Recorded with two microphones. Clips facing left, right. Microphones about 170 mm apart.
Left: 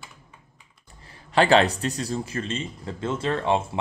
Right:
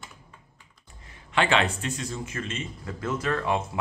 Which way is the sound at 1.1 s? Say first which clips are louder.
Left 6 dB; 35° left (ahead or behind).